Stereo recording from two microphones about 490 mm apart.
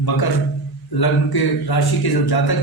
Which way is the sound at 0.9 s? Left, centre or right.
Left.